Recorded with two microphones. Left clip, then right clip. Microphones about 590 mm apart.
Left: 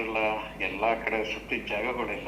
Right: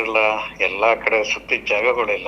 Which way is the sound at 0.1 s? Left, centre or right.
Right.